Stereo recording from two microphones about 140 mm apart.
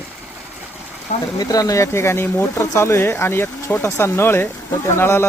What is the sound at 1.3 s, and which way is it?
Speech, 25° left (ahead or behind).